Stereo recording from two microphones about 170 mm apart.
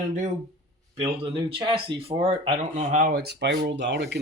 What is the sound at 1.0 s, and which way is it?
Speech, 35° right (ahead or behind).